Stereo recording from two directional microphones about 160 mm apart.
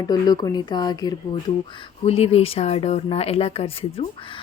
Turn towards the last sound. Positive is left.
turn(degrees=35)  # may be behind; listen again after turning